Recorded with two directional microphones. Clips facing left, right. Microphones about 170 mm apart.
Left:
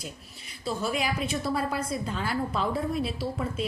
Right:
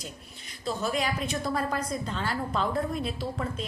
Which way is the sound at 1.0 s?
5° left (ahead or behind).